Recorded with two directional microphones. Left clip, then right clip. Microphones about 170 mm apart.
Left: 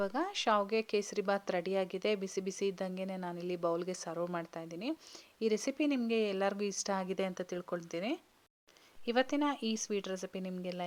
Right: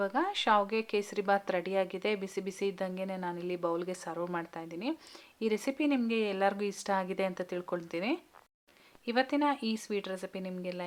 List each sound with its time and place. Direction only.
0.0 s speech: 35° left (ahead or behind)
9.0 s speech: 35° left (ahead or behind)